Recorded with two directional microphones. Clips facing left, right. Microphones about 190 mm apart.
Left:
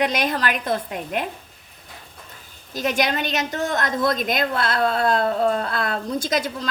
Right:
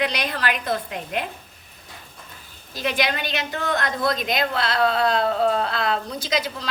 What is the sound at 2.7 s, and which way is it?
A woman's voice, 45° left (ahead or behind).